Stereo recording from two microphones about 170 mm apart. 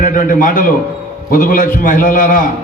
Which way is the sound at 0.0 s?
55° left (ahead or behind).